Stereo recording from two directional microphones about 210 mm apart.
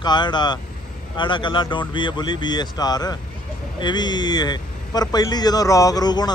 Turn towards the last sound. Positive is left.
turn(degrees=20)  # may be behind; listen again after turning